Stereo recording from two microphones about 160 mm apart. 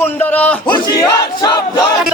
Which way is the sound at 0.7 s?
25° left (ahead or behind).